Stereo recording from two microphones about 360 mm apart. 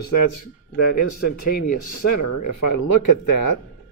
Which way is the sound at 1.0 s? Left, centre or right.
Left.